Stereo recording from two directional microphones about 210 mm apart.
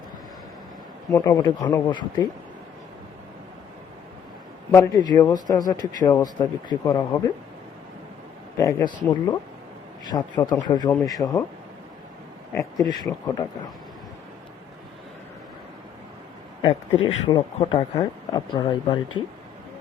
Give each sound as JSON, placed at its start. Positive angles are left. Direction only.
{"t": 1.1, "sound": "a man's voice", "side_deg": 15}
{"t": 4.7, "sound": "speech", "side_deg": 15}
{"t": 8.5, "sound": "a man's voice", "side_deg": 15}
{"t": 12.5, "sound": "speech", "side_deg": 15}
{"t": 16.6, "sound": "a man's voice", "side_deg": 20}